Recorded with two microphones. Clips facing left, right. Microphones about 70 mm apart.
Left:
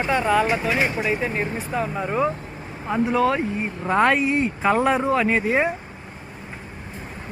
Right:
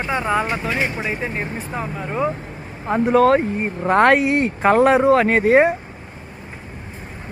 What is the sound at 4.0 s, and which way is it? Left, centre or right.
Speech, right.